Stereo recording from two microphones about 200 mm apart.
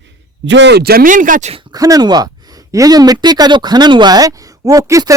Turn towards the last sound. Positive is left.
turn(degrees=-15)  # may be behind; listen again after turning